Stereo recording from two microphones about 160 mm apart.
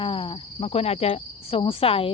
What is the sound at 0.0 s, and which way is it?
Speech, 35° left (ahead or behind).